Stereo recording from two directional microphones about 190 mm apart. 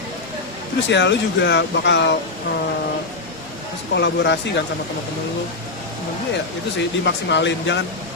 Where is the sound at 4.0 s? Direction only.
65° left (ahead or behind).